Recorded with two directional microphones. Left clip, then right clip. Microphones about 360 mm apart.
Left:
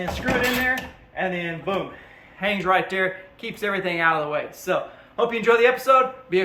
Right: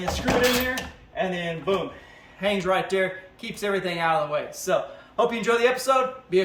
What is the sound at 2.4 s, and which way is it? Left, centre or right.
Speech, centre.